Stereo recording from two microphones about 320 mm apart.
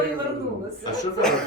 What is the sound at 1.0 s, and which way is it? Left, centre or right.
Speech, centre.